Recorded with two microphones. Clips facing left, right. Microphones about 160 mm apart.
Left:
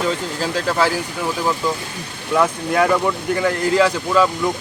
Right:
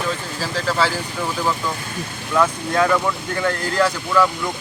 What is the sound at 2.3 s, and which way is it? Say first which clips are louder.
Speech: left 2 dB; 10° left (ahead or behind).